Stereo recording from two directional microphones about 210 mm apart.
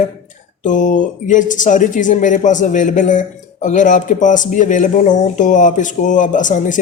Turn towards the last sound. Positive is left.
turn(degrees=35)  # may be behind; listen again after turning